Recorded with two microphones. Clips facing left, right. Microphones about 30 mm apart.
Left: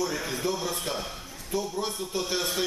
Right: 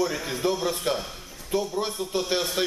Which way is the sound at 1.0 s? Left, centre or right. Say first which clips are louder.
Even; centre.